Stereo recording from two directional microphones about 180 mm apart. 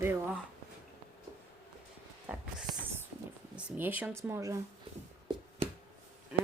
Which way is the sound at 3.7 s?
10° right (ahead or behind).